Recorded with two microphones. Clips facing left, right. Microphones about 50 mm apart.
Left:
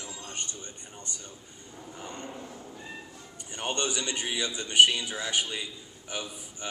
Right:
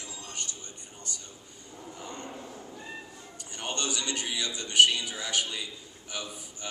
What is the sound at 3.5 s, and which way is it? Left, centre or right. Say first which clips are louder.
A man's voice: left 2 dB; left.